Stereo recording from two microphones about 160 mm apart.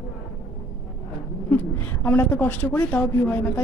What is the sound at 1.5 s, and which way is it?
A woman's voice, 15° left (ahead or behind).